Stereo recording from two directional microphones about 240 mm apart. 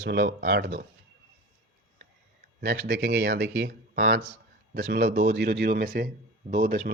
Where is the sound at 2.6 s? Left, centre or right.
Right.